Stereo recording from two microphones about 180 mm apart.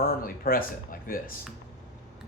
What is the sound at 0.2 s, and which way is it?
Speech, 55° left (ahead or behind).